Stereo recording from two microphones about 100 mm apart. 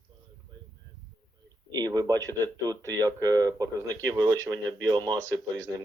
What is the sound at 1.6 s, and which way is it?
Speech, 40° right (ahead or behind).